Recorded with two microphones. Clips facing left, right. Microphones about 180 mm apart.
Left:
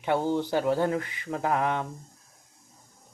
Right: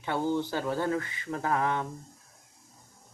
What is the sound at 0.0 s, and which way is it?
Speech, 20° left (ahead or behind).